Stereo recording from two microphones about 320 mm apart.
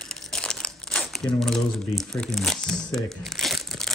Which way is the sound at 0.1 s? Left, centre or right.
Centre.